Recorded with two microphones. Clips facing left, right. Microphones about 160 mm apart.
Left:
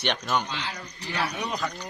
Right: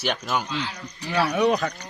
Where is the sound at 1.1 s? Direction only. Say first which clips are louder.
Right 10 dB; 70° right (ahead or behind).